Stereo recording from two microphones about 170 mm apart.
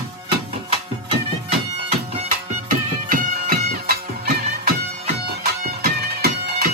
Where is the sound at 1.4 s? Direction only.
40° right (ahead or behind).